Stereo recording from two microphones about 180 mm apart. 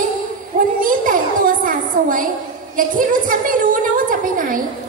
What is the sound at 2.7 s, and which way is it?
A woman's voice, 50° right (ahead or behind).